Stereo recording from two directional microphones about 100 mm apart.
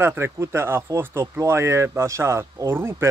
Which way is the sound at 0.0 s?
25° right (ahead or behind).